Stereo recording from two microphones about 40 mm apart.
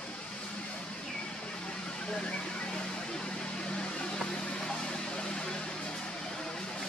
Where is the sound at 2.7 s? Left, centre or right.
Centre.